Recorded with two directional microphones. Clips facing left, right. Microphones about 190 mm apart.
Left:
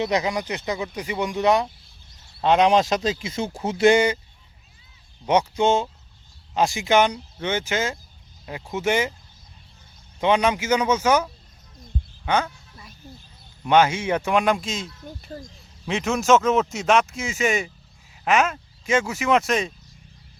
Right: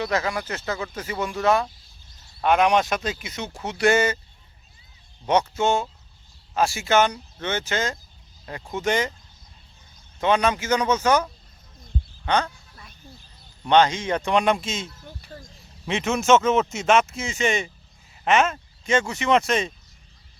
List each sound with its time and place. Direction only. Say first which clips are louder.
0.0 s speech: left 2 dB; 20° left (ahead or behind)
5.2 s speech: left 2 dB; 10° left (ahead or behind)
10.2 s speech: left 1 dB; 15° left (ahead or behind)
12.2 s a sound: even; 10° left (ahead or behind)
13.7 s speech: even; 10° left (ahead or behind)
15.2 s speech: left 7 dB; 20° left (ahead or behind)
15.9 s speech: even; centre (ahead or behind)